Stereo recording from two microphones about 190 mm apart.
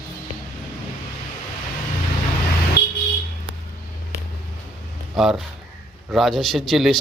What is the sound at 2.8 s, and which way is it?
Vehicle, 60° left (ahead or behind).